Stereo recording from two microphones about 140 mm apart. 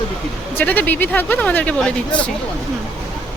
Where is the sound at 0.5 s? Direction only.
10° left (ahead or behind).